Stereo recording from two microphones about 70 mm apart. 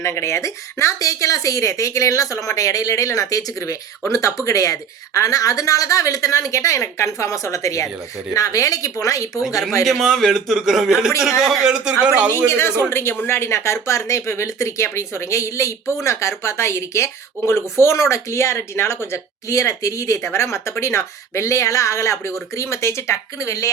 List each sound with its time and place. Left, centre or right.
0.0 s speech: left
9.8 s a man's voice: centre
12.5 s speech: left